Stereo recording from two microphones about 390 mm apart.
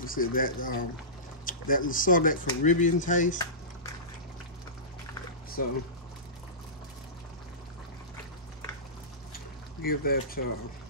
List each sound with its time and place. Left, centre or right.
0.0 s speech: left
9.3 s pour: left